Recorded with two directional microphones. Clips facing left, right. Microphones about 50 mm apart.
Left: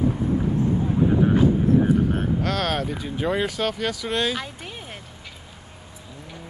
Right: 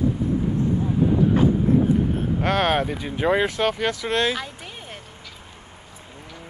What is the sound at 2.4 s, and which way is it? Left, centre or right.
Speech, right.